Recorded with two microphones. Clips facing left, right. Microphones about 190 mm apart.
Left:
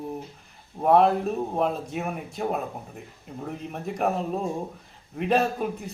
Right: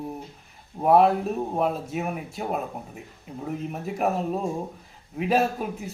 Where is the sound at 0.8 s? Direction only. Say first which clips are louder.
Right 1 dB; 5° right (ahead or behind).